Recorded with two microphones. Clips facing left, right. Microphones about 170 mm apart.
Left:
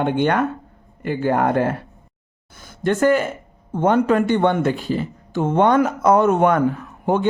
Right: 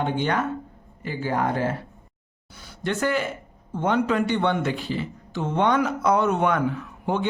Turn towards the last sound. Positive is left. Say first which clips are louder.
# left 6 dB
turn(degrees=45)  # may be behind; listen again after turning